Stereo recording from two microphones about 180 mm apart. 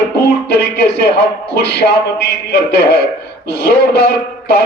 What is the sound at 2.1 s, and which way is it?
A man's voice, 65° left (ahead or behind).